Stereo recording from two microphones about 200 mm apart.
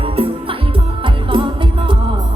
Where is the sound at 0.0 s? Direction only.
25° right (ahead or behind).